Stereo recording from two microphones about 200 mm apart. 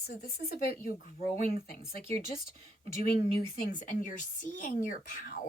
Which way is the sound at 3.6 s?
40° left (ahead or behind).